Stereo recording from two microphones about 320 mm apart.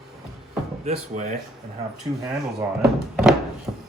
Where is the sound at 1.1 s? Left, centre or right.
Right.